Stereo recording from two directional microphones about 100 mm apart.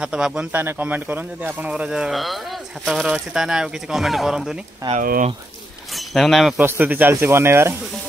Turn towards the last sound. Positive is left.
turn(degrees=-25)  # may be behind; listen again after turning